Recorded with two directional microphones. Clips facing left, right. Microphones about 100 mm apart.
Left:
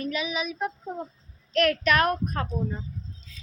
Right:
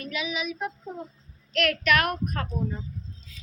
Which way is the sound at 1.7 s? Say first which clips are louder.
Left 1 dB; 30° left (ahead or behind).